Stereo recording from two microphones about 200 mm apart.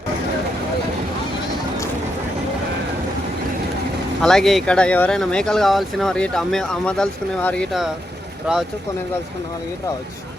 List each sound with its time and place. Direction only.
4.2 s speech: centre (ahead or behind)